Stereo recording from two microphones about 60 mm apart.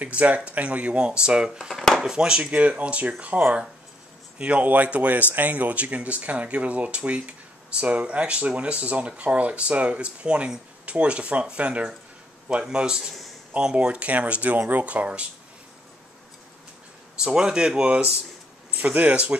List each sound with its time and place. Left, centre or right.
0.0 s speech: right
1.7 s speech: centre
2.0 s speech: centre
17.2 s speech: centre